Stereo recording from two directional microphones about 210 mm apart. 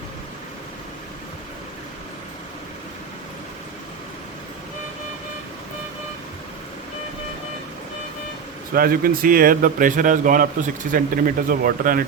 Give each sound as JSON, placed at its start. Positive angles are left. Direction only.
{"t": 8.7, "sound": "speech", "side_deg": -45}